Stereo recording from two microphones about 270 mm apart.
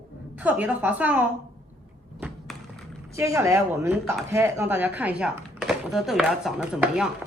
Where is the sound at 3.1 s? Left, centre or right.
Centre.